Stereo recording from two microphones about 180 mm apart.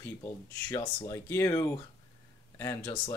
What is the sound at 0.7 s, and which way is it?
Speech, 20° left (ahead or behind).